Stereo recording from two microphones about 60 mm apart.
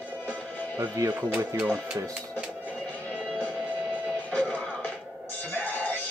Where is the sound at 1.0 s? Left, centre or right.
Right.